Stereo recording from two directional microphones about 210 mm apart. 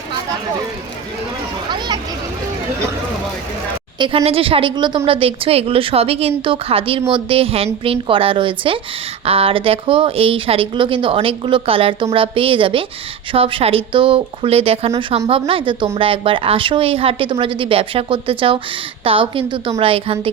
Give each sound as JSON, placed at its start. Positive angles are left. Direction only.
{"t": 3.9, "sound": "a woman's voice", "side_deg": -25}